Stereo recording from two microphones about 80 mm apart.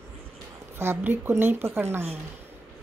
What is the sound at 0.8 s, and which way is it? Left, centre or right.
A woman's voice, right.